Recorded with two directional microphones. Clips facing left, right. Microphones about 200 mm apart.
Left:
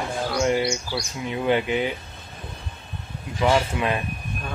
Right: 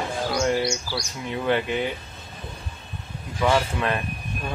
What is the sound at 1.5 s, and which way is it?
Speech, 15° left (ahead or behind).